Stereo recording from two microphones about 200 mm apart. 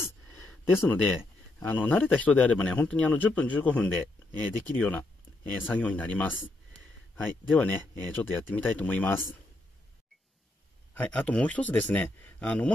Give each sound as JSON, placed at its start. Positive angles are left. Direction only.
{"t": 0.0, "sound": "a sound", "side_deg": 10}
{"t": 1.6, "sound": "a man's voice", "side_deg": 10}
{"t": 11.0, "sound": "a man's voice", "side_deg": 5}